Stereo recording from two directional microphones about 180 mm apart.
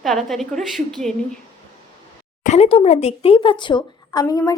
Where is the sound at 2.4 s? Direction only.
35° left (ahead or behind).